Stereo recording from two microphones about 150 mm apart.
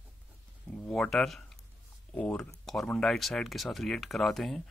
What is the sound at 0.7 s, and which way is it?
Speech, 5° left (ahead or behind).